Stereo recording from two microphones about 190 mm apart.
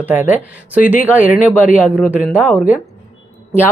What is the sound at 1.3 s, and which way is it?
Speech, 45° left (ahead or behind).